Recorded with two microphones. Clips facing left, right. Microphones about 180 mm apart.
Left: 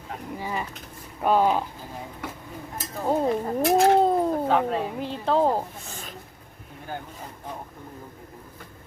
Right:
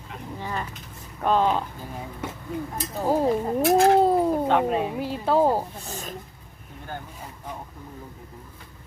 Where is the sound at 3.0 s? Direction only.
5° right (ahead or behind).